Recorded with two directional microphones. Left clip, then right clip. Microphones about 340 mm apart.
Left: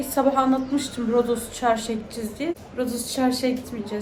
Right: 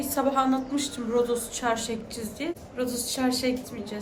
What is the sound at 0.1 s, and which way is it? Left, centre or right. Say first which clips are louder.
A woman's voice: left 4 dB; centre.